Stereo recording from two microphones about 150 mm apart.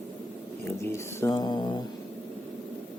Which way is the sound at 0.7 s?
15° left (ahead or behind).